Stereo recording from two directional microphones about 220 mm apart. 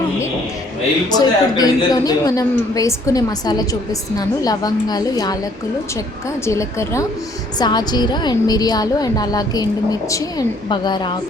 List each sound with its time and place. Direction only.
1.1 s a woman's voice: 15° left (ahead or behind)
6.4 s a woman's voice: 15° left (ahead or behind)